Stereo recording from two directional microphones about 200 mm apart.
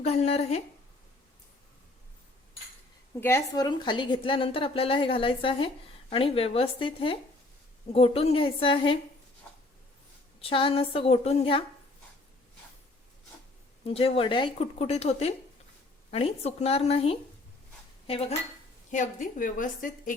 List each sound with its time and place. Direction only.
0.0 s a woman's voice: 30° left (ahead or behind)
3.2 s a woman's voice: 10° left (ahead or behind)
10.4 s a woman's voice: 25° left (ahead or behind)
13.8 s a woman's voice: 30° left (ahead or behind)
18.9 s a woman's voice: 40° left (ahead or behind)